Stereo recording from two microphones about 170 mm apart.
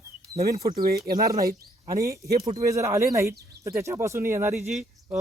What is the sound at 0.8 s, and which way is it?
Speech, 65° right (ahead or behind).